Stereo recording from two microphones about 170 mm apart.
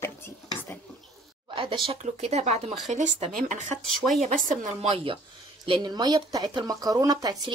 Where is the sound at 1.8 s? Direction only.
40° right (ahead or behind).